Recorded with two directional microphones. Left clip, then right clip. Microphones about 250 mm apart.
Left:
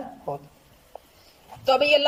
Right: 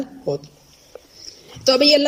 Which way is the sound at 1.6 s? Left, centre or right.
Right.